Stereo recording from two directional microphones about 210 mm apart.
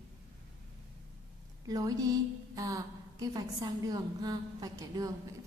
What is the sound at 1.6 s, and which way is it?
A woman's voice, 15° right (ahead or behind).